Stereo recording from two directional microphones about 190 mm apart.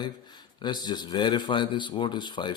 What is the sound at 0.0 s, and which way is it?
A man's voice, 20° left (ahead or behind).